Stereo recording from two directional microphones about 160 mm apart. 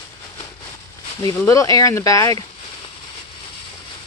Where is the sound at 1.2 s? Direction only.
20° left (ahead or behind).